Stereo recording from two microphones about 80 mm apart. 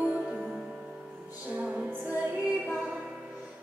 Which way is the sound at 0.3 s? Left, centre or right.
Centre.